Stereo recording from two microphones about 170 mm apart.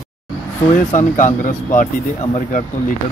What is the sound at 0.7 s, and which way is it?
Speech, 45° left (ahead or behind).